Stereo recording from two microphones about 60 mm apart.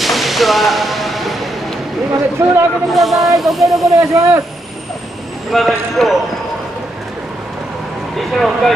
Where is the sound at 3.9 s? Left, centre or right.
Right.